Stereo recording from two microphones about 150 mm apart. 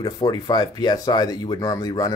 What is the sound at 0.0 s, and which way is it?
Speech, 25° left (ahead or behind).